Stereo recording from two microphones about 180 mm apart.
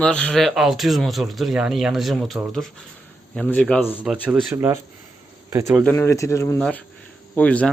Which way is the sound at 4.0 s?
5° right (ahead or behind).